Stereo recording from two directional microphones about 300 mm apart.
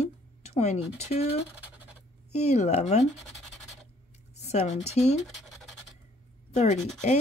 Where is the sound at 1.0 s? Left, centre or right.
Left.